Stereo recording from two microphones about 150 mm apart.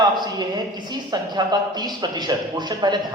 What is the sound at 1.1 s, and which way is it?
Speech, 30° right (ahead or behind).